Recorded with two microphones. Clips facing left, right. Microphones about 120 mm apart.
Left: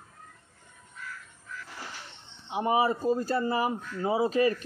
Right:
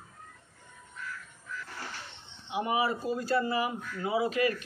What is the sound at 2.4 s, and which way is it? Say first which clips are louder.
Speech: left 4 dB; 30° left (ahead or behind).